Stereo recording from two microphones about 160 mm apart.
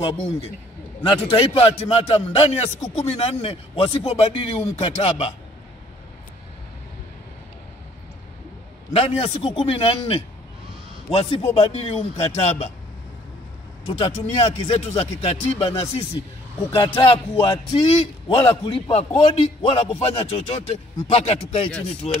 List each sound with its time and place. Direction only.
1.0 s a man's voice: 35° left (ahead or behind)
8.9 s a man's voice: 35° left (ahead or behind)
13.8 s a man's voice: 35° left (ahead or behind)
16.7 s a man's voice: 30° left (ahead or behind)